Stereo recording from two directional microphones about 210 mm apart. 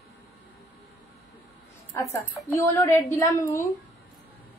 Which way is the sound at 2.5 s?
10° left (ahead or behind).